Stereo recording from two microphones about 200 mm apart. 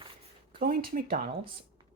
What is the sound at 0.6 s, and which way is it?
Speech, 45° right (ahead or behind).